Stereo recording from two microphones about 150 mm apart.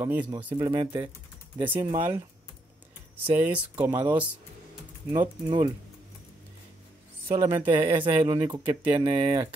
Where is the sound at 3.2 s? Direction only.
10° right (ahead or behind).